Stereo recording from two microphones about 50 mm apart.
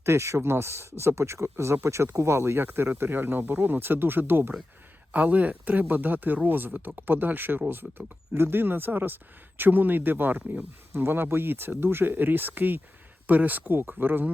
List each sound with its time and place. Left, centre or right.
0.0 s speech: right
5.1 s speech: right
13.7 s speech: right